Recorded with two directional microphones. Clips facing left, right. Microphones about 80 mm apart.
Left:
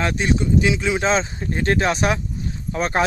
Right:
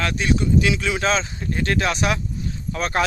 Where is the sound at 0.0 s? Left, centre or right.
Left.